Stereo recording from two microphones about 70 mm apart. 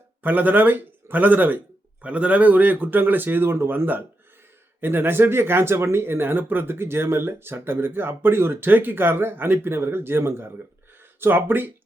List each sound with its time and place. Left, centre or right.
0.2 s a man's voice: right